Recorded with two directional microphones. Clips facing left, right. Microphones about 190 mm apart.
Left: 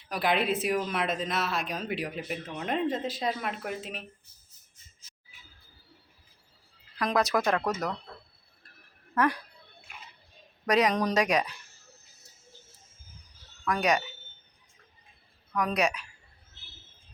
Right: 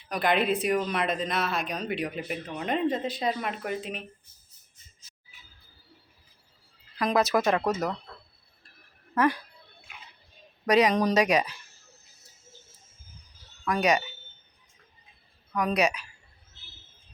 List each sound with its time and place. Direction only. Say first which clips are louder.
0.1 s speech: right 2 dB; centre (ahead or behind)
7.0 s speech: right 2 dB; centre (ahead or behind)
8.1 s a sound: left 1 dB; 20° left (ahead or behind)
9.1 s speech: right 2 dB; centre (ahead or behind)
10.7 s speech: right 3 dB; centre (ahead or behind)
13.7 s speech: right 2 dB; centre (ahead or behind)
15.5 s speech: right 2 dB; centre (ahead or behind)